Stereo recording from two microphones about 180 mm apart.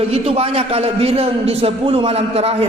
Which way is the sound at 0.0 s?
35° right (ahead or behind).